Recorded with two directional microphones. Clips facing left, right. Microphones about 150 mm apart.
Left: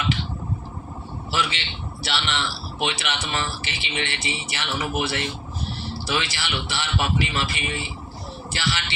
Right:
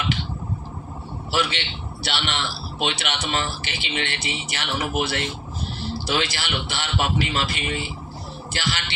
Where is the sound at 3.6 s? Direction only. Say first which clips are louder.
Right 1 dB; 60° right (ahead or behind).